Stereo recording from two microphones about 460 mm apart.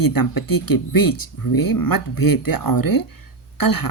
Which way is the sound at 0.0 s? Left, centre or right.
Left.